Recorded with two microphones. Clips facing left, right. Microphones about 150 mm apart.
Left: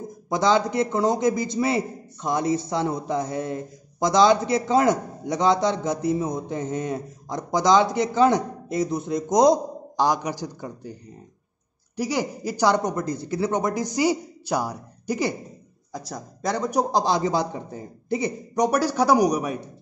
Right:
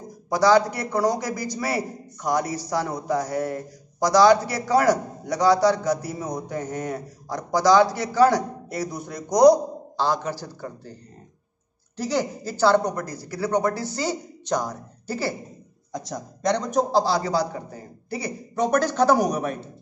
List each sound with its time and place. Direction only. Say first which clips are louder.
0.3 s a man's voice: right 2 dB; 20° left (ahead or behind)
12.0 s speech: even; 10° left (ahead or behind)
15.9 s speech: right 2 dB; 5° left (ahead or behind)
16.9 s speech: right 1 dB; 20° left (ahead or behind)